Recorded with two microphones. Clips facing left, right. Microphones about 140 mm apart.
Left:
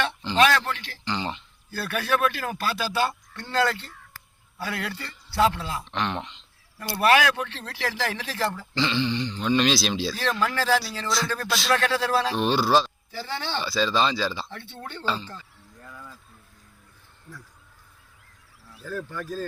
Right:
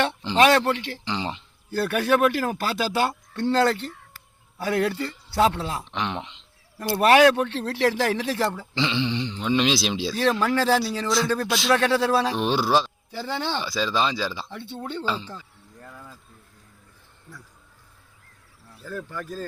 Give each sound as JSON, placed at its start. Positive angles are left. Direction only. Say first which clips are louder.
{"t": 0.3, "sound": "speech", "louder": "right 3 dB", "side_deg": -25}
{"t": 19.1, "sound": "speech", "louder": "left 1 dB", "side_deg": 0}